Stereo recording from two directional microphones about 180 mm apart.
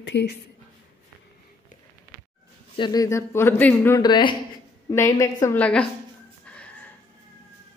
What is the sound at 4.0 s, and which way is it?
Speech, 25° left (ahead or behind).